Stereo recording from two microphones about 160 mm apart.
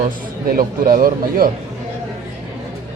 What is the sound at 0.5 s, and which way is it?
Speech, 60° right (ahead or behind).